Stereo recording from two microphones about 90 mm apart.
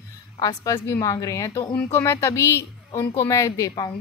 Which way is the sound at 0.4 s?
45° left (ahead or behind).